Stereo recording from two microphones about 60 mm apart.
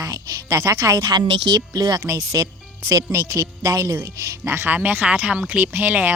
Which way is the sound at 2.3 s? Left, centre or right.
Right.